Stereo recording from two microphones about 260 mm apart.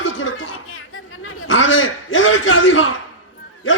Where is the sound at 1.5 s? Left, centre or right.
Left.